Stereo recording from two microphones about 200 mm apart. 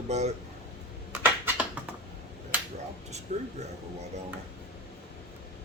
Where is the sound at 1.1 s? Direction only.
10° right (ahead or behind).